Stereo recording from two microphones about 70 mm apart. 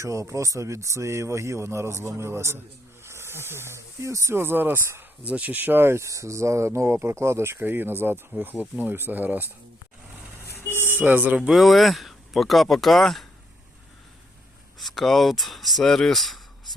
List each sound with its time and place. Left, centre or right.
0.0 s speech: right
5.2 s speech: right
10.4 s vehicle: left
10.8 s speech: right
11.3 s speech: centre
14.8 s speech: centre